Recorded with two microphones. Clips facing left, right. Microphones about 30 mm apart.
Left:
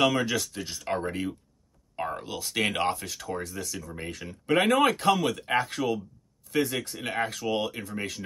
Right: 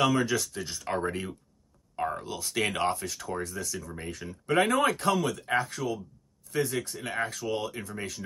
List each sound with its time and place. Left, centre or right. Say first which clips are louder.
0.1 s speech: right 1 dB; centre
2.0 s speech: right 1 dB; centre
2.4 s speech: left 1 dB; centre
5.6 s speech: left 3 dB; left
6.5 s speech: left 2 dB; centre